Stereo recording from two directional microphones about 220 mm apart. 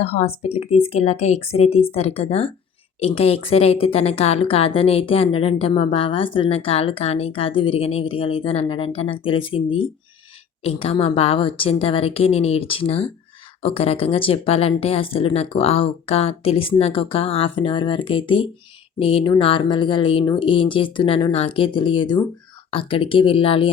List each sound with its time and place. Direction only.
0.0 s a woman's voice: 30° left (ahead or behind)